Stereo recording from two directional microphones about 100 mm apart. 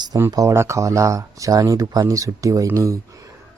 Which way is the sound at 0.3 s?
30° right (ahead or behind).